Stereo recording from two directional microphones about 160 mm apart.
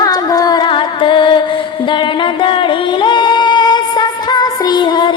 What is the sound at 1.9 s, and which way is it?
Singing, 30° left (ahead or behind).